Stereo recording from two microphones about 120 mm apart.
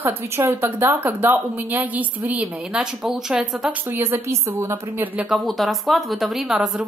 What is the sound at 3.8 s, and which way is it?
A woman's voice, 20° right (ahead or behind).